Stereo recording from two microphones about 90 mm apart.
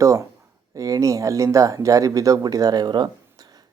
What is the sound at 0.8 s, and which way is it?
Speech, 40° right (ahead or behind).